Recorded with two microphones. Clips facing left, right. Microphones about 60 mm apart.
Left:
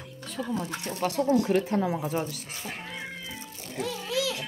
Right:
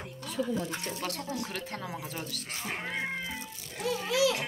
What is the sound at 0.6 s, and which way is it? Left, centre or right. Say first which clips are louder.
Speech: left 1 dB; left.